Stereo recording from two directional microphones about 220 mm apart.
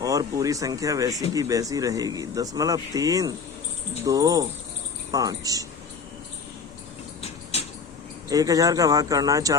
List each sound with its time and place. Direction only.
0.0 s speech: 15° right (ahead or behind)
8.3 s speech: 15° right (ahead or behind)